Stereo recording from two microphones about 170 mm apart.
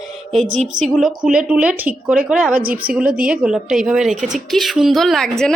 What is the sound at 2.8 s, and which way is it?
Speech, 60° right (ahead or behind).